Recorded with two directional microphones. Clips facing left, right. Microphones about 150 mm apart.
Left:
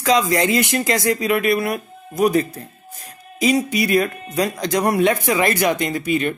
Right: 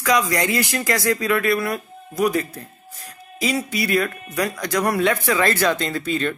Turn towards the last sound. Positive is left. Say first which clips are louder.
# left 3 dB
turn(degrees=15)  # may be behind; listen again after turning